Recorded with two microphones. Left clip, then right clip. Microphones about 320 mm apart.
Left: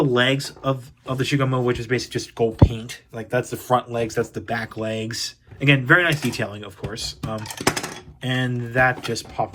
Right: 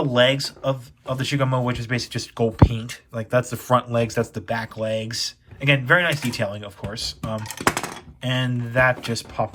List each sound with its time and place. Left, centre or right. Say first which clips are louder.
0.0 s speech: right 1 dB; centre